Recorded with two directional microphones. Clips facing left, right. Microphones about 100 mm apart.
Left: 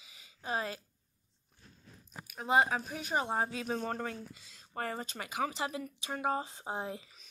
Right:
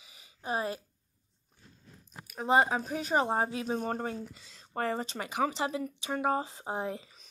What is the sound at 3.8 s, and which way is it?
Speech, 35° right (ahead or behind).